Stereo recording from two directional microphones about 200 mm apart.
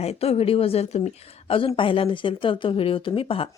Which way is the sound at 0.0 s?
30° left (ahead or behind).